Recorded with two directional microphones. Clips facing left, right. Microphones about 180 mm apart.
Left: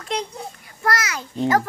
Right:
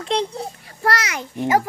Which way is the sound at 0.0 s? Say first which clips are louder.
Right 5 dB; 30° right (ahead or behind).